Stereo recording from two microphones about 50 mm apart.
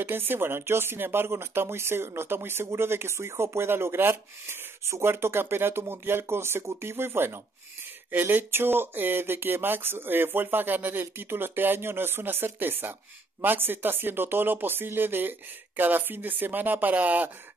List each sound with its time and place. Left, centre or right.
0.0 s speech: right
8.1 s speech: right